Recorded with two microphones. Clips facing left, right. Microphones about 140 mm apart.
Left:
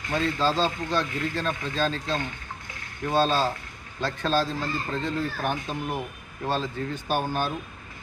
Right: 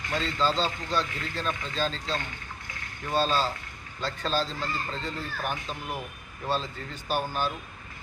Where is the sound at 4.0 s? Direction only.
60° left (ahead or behind).